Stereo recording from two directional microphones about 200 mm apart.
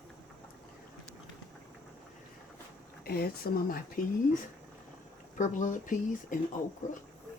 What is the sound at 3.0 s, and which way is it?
Speech, 50° left (ahead or behind).